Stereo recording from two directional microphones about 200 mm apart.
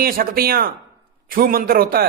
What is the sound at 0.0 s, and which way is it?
A man's voice, 50° right (ahead or behind).